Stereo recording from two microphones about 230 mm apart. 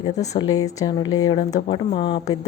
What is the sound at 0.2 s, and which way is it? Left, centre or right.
Speech, centre.